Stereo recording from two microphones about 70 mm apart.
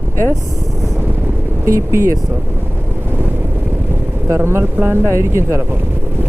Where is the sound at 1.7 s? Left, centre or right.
Right.